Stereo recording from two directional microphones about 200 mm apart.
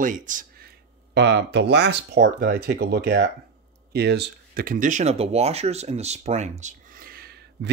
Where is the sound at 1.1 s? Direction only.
60° right (ahead or behind).